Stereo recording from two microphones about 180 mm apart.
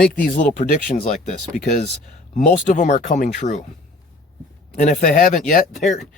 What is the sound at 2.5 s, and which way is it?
Speech, 45° left (ahead or behind).